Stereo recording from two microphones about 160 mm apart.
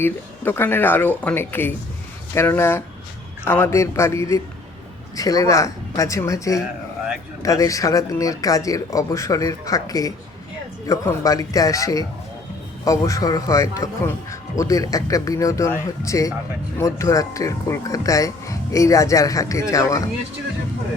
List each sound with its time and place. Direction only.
0.0 s speech: 15° left (ahead or behind)